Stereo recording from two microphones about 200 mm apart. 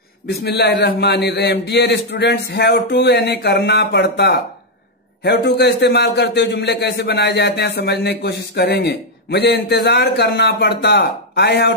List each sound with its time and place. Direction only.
0.3 s a man's voice: 55° left (ahead or behind)